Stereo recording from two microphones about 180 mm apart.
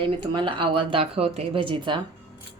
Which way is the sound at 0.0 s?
25° right (ahead or behind).